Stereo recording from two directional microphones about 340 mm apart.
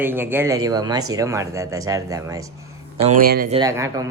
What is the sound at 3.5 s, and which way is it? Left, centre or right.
Speech, centre.